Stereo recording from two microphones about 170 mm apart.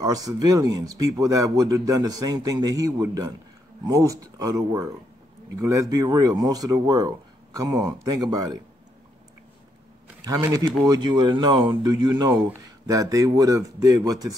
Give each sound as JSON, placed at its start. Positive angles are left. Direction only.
{"t": 0.0, "sound": "speech", "side_deg": -20}
{"t": 10.2, "sound": "speech", "side_deg": -20}